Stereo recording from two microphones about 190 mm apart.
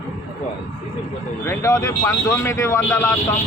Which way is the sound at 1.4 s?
15° left (ahead or behind).